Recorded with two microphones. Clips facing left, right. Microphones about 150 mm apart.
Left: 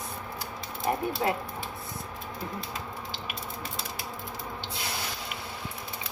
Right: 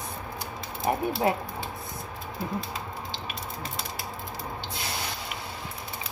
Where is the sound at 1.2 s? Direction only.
20° right (ahead or behind).